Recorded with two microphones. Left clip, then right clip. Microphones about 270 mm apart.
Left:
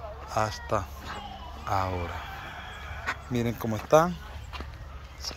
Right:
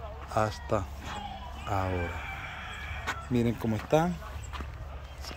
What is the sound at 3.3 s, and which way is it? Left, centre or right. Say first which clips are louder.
Speech: right 3 dB; centre.